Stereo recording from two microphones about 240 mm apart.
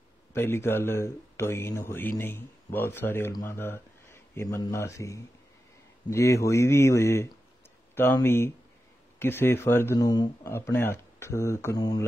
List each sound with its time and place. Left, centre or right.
0.3 s speech: centre